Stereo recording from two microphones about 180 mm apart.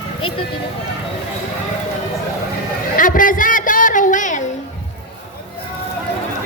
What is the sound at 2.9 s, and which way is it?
Music, 50° left (ahead or behind).